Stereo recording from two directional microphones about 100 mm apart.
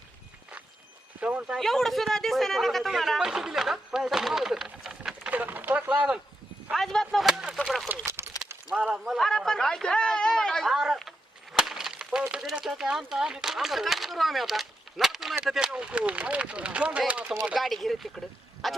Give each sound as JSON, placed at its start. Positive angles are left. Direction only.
{"t": 1.2, "sound": "speech", "side_deg": -15}
{"t": 1.5, "sound": "speech", "side_deg": 5}
{"t": 6.7, "sound": "speech", "side_deg": 0}
{"t": 7.4, "sound": "a sound", "side_deg": -10}
{"t": 8.0, "sound": "a sound", "side_deg": -25}
{"t": 8.7, "sound": "a man's voice", "side_deg": -5}
{"t": 11.5, "sound": "a sound", "side_deg": -5}
{"t": 12.3, "sound": "speech", "side_deg": -5}
{"t": 17.4, "sound": "speech", "side_deg": 0}